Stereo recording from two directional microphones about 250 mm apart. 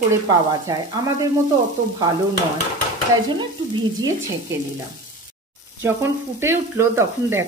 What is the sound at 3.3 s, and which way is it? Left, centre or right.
Stir, centre.